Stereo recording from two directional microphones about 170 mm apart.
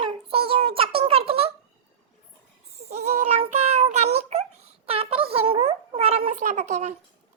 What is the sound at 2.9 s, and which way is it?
Child singing, 40° right (ahead or behind).